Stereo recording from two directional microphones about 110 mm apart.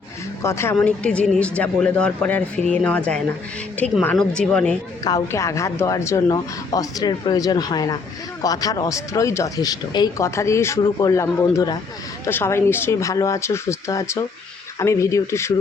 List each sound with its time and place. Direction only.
0.4 s speech: 25° left (ahead or behind)
0.9 s speech: 10° left (ahead or behind)
5.0 s a woman's voice: 30° left (ahead or behind)
10.2 s a woman's voice: 25° left (ahead or behind)
12.2 s speech: 20° left (ahead or behind)